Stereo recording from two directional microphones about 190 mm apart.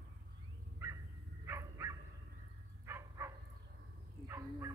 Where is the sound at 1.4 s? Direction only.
15° right (ahead or behind).